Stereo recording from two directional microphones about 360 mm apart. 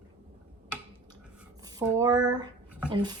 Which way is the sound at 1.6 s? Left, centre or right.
Centre.